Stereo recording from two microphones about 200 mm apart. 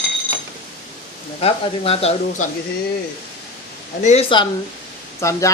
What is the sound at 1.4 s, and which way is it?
Speech, 30° left (ahead or behind).